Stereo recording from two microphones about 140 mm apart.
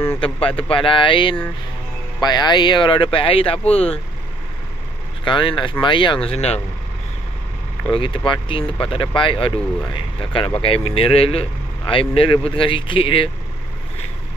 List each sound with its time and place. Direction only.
0.2 s speech: 40° left (ahead or behind)
5.2 s speech: 35° left (ahead or behind)
6.2 s speech: 50° left (ahead or behind)
7.9 s speech: 40° left (ahead or behind)